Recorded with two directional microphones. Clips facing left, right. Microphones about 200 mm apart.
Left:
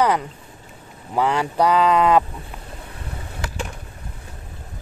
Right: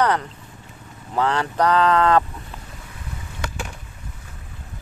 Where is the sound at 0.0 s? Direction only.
10° left (ahead or behind).